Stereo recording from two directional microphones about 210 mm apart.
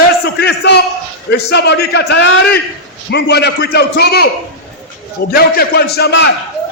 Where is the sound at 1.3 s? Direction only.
50° left (ahead or behind).